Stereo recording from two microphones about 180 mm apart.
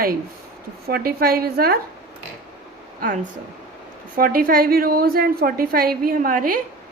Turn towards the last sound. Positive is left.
turn(degrees=-50)  # may be behind; listen again after turning